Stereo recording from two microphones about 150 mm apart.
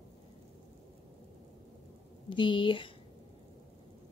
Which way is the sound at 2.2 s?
35° left (ahead or behind).